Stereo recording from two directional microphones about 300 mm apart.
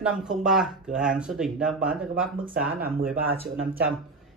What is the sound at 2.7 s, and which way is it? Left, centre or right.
Speech, right.